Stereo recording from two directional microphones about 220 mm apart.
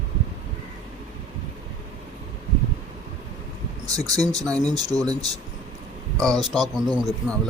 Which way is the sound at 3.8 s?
15° right (ahead or behind).